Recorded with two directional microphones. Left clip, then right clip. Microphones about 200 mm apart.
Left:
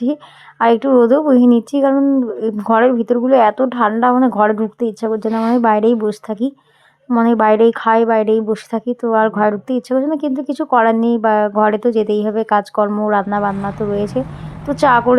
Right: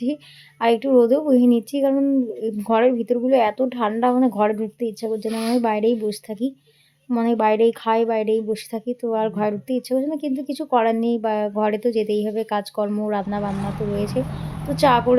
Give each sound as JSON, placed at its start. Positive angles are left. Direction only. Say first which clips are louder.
{"t": 0.6, "sound": "speech", "louder": "left 5 dB", "side_deg": 20}